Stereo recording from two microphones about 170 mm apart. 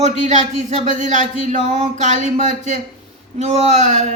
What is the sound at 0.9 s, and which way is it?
A woman's voice, 45° right (ahead or behind).